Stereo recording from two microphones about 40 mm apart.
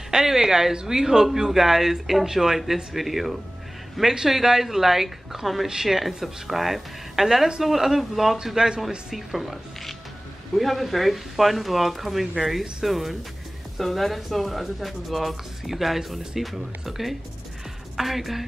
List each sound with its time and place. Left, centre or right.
0.1 s speech: centre
8.5 s speech: centre
9.1 s speech: centre